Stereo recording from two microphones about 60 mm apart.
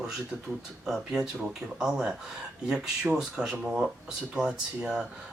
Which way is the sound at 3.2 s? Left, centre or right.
Centre.